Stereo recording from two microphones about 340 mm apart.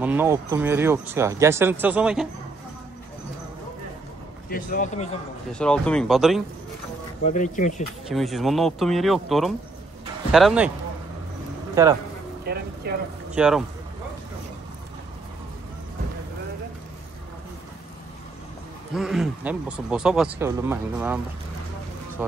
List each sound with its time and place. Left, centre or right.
0.0 s speech: centre
4.5 s speech: left
5.5 s speech: centre
7.2 s speech: left
8.1 s speech: centre
11.7 s speech: centre
12.4 s a sound: right
13.3 s speech: centre
18.9 s speech: centre